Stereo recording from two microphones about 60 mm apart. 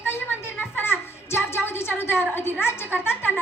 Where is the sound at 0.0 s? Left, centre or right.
Left.